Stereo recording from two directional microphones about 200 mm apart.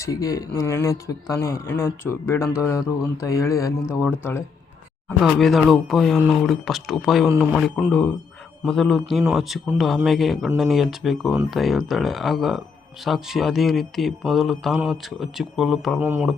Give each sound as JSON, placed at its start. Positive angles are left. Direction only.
{"t": 0.0, "sound": "speech", "side_deg": 15}
{"t": 5.0, "sound": "speech", "side_deg": 0}